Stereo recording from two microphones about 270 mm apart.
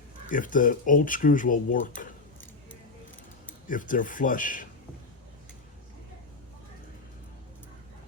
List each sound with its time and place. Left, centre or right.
0.3 s speech: left
3.7 s speech: left